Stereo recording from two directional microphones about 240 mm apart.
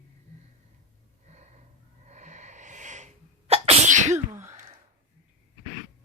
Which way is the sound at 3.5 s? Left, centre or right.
Right.